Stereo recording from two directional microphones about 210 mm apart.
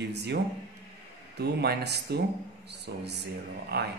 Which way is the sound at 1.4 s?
50° right (ahead or behind).